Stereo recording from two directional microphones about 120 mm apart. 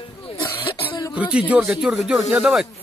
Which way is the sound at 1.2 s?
10° right (ahead or behind).